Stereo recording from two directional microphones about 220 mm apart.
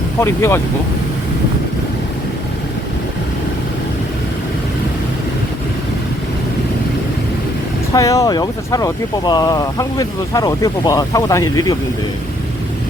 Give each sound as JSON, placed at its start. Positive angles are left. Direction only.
{"t": 0.2, "sound": "speech", "side_deg": 10}
{"t": 7.9, "sound": "speech", "side_deg": 15}